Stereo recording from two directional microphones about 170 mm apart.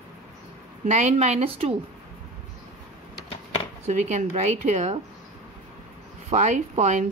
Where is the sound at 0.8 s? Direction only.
45° right (ahead or behind).